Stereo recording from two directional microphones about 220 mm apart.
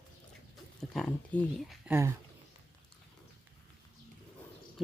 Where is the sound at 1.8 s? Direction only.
10° right (ahead or behind).